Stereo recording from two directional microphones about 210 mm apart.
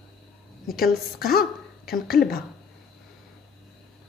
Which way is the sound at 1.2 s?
45° left (ahead or behind).